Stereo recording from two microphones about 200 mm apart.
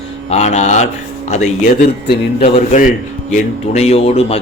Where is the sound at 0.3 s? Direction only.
35° left (ahead or behind).